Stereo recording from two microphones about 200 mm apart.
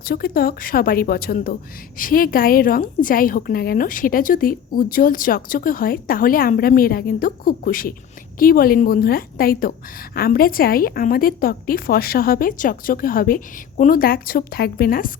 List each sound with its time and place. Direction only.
0.0 s a woman's voice: 50° left (ahead or behind)